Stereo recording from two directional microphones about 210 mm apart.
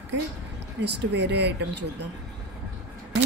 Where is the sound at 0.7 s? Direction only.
55° right (ahead or behind).